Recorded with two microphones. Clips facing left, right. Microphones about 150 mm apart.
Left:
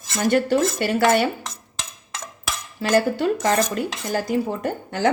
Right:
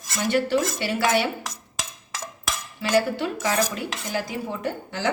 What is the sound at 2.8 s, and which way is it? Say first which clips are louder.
Dishes: left 3 dB; 45° left (ahead or behind).